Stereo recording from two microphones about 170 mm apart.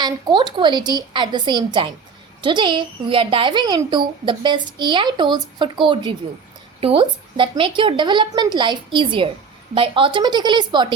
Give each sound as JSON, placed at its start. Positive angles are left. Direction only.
{"t": 0.0, "sound": "a woman's voice", "side_deg": -25}